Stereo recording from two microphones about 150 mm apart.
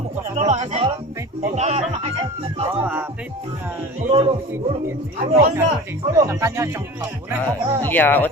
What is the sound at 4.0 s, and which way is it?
Speech, 45° right (ahead or behind).